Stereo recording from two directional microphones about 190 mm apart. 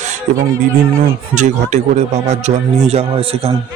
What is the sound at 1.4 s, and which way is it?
A man's voice, 40° right (ahead or behind).